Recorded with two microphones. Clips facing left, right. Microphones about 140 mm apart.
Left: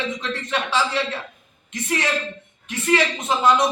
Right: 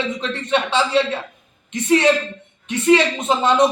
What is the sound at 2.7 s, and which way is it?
Speech, 20° right (ahead or behind).